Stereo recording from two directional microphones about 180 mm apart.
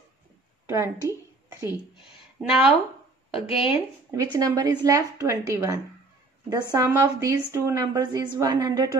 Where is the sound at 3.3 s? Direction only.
30° left (ahead or behind).